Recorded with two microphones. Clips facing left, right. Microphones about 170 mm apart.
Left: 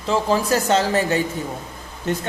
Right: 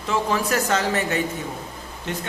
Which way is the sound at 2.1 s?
40° left (ahead or behind).